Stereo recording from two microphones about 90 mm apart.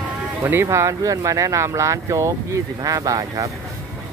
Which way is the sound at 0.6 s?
35° right (ahead or behind).